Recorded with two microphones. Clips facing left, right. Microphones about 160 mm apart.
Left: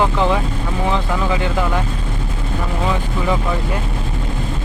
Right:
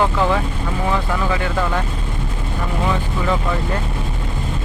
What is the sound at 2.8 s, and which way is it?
Speech, 15° left (ahead or behind).